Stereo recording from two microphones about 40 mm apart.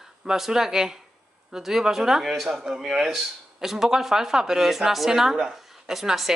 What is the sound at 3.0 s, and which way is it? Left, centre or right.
A woman's voice, centre.